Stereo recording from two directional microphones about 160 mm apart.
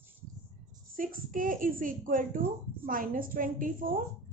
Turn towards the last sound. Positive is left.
turn(degrees=-60)  # may be behind; listen again after turning